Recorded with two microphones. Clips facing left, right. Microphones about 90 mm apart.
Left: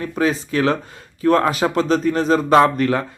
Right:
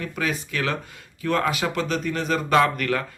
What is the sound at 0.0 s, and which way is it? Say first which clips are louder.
Speech: left 7 dB; 30° left (ahead or behind).